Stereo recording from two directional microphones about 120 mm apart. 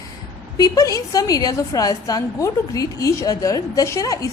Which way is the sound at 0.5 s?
30° left (ahead or behind).